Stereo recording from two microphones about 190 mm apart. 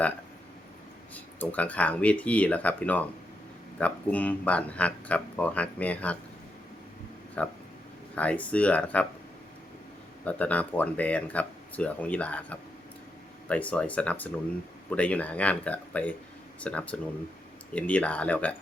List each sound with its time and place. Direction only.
1.1 s speech: 10° left (ahead or behind)
7.4 s speech: 5° left (ahead or behind)
10.2 s speech: 10° left (ahead or behind)